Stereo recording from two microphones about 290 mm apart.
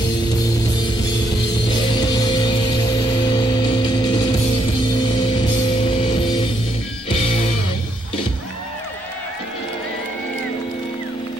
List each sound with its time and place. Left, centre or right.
2.0 s music: centre
7.1 s music: centre